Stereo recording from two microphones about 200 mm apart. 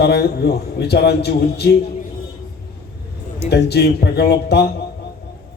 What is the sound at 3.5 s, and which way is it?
A man's voice, 55° left (ahead or behind).